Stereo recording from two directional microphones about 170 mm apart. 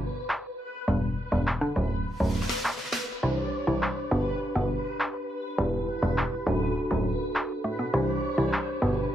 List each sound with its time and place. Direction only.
0.8 s music: centre (ahead or behind)